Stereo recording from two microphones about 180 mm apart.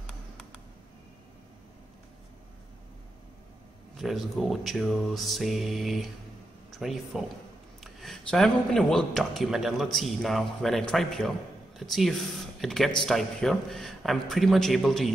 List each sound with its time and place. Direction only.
3.9 s speech: centre (ahead or behind)